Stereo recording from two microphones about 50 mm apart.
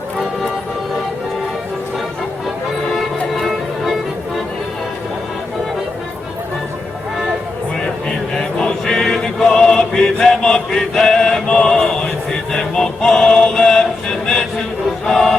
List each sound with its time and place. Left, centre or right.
2.9 s music: centre
8.4 s chant: centre
15.0 s music: centre